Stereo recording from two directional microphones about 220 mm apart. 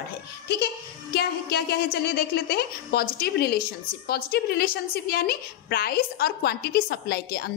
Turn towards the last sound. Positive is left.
turn(degrees=45)  # may be behind; listen again after turning